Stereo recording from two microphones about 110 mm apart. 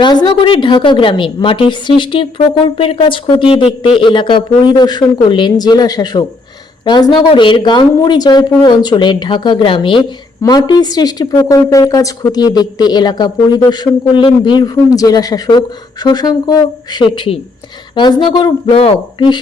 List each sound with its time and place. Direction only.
0.3 s a woman's voice: 50° left (ahead or behind); by 17.0 s 35° left (ahead or behind)
17.0 s a woman's voice: 55° left (ahead or behind)